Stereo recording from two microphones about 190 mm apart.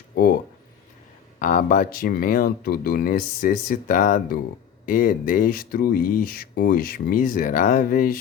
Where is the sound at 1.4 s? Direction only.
45° left (ahead or behind).